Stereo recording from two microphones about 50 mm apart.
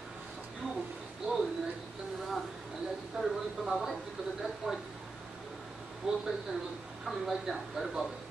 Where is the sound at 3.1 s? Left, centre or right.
Centre.